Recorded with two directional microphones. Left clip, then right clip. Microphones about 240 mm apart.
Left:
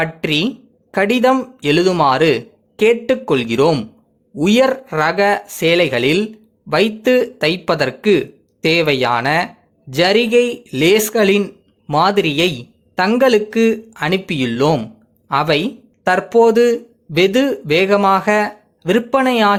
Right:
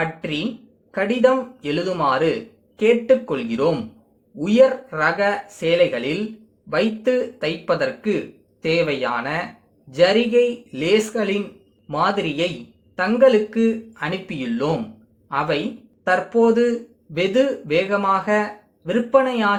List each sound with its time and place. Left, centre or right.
0.0 s speech: left